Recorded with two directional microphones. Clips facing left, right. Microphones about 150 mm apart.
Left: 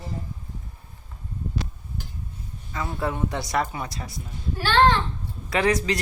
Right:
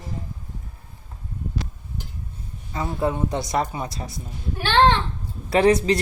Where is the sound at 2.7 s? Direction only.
20° right (ahead or behind).